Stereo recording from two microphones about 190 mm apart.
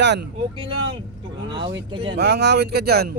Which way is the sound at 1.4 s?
25° right (ahead or behind).